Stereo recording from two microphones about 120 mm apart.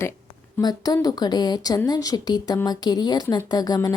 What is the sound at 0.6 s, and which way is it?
A woman's voice, 35° left (ahead or behind).